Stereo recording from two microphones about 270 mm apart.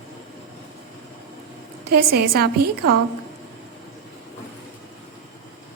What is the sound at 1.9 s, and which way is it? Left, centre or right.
Speech, right.